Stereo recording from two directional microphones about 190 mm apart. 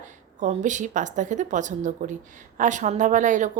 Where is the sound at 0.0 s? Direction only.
40° right (ahead or behind).